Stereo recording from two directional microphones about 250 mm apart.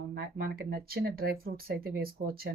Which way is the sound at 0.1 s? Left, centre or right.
Right.